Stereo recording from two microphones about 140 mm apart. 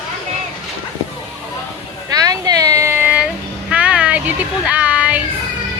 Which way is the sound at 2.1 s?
25° right (ahead or behind).